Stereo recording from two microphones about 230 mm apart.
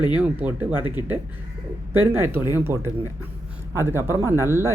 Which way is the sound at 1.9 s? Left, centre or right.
Centre.